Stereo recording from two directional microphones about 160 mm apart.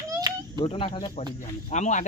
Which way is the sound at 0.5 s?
35° left (ahead or behind).